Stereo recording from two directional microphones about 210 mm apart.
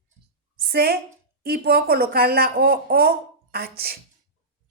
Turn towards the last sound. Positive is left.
turn(degrees=-45)  # may be behind; listen again after turning